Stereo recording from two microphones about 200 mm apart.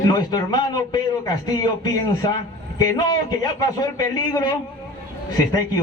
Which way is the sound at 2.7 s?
20° left (ahead or behind).